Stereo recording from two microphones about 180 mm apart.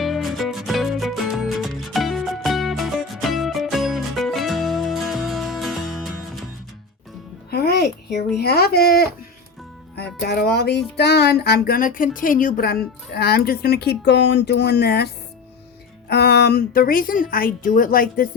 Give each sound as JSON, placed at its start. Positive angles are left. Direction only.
{"t": 0.0, "sound": "music", "side_deg": 0}
{"t": 7.5, "sound": "music", "side_deg": 65}
{"t": 8.4, "sound": "speech", "side_deg": 60}
{"t": 9.9, "sound": "music", "side_deg": 65}
{"t": 16.0, "sound": "a woman's voice", "side_deg": 65}